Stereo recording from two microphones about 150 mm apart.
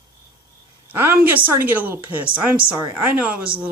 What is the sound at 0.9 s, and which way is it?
A woman's voice, 15° right (ahead or behind).